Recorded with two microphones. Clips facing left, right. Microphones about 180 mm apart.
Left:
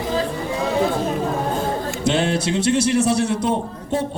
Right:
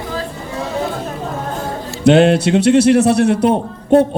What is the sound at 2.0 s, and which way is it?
A man's voice, 65° right (ahead or behind).